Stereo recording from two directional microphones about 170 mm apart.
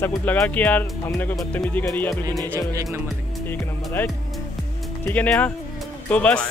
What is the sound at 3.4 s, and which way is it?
Speech, 15° left (ahead or behind).